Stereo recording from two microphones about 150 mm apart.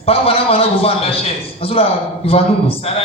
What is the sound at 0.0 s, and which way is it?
A man's voice, 40° left (ahead or behind).